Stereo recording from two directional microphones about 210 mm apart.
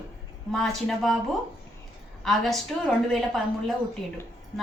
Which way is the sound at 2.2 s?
Centre (ahead or behind).